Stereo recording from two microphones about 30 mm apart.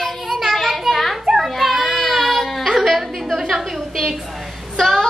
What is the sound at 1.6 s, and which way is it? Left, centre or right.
Baby cry, centre.